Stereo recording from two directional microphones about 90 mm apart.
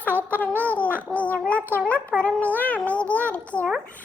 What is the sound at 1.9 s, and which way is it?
Speech, 15° left (ahead or behind).